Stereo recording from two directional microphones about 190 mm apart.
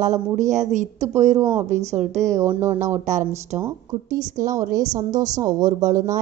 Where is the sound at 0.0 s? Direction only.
40° right (ahead or behind).